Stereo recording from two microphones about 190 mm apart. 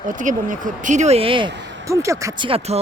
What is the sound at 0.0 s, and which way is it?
Speech, 45° right (ahead or behind).